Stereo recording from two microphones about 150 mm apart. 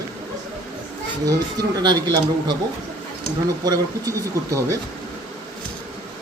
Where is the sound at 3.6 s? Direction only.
25° right (ahead or behind).